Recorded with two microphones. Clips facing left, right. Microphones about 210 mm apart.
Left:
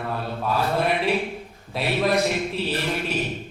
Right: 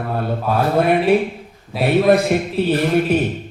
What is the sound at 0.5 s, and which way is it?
Speech, 55° right (ahead or behind).